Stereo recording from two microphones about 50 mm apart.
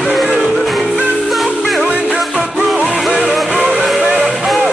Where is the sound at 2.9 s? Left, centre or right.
Centre.